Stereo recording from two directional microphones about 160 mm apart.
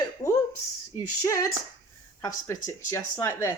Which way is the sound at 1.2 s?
20° left (ahead or behind).